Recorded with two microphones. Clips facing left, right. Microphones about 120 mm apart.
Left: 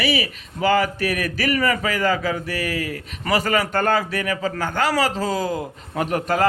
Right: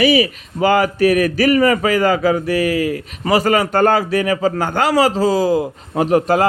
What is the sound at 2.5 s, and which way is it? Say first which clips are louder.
Speech: right 9 dB; 40° left (ahead or behind).